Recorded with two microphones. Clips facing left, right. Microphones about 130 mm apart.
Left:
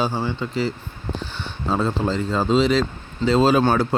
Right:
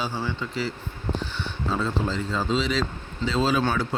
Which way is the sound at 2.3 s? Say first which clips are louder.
Left 8 dB; 75° left (ahead or behind).